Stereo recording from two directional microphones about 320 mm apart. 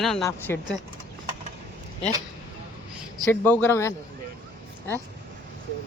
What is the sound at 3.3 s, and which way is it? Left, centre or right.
Speech, centre.